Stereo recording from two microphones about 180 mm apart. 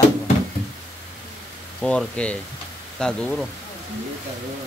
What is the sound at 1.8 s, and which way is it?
Speech, 5° left (ahead or behind).